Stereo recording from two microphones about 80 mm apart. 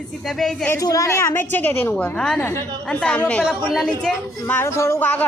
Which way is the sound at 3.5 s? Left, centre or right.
Centre.